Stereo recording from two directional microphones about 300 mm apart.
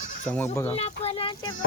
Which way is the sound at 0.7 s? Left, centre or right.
Centre.